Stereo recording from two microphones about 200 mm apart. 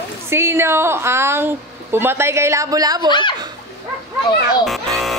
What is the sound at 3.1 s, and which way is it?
Speech, 25° left (ahead or behind).